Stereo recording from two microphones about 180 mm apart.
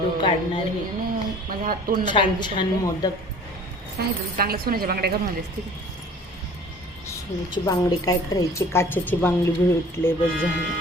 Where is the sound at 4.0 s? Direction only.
55° right (ahead or behind).